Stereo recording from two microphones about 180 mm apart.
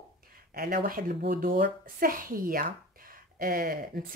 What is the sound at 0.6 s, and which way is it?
Speech, 55° right (ahead or behind).